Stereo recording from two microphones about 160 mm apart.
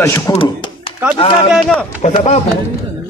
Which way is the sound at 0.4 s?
35° left (ahead or behind).